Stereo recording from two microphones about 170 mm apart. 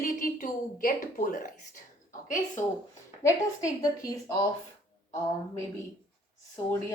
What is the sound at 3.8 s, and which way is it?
Speech, 20° left (ahead or behind).